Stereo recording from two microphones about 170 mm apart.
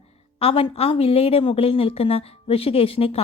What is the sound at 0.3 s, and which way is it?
Speech, 35° left (ahead or behind).